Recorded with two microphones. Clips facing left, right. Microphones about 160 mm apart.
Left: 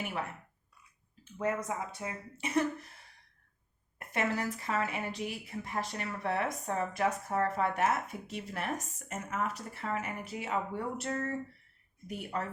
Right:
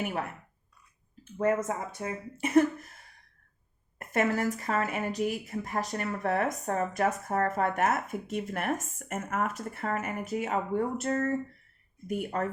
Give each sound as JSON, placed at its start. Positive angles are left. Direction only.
{"t": 1.2, "sound": "speech", "side_deg": -45}
{"t": 3.9, "sound": "speech", "side_deg": -45}